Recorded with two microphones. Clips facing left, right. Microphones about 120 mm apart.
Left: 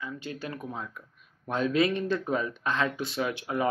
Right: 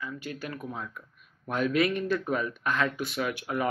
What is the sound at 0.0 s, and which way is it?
Speech, 25° left (ahead or behind).